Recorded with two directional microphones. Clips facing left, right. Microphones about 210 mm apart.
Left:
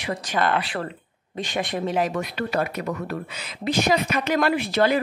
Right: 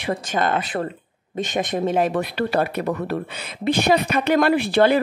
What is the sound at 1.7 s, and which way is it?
Speech, 50° right (ahead or behind).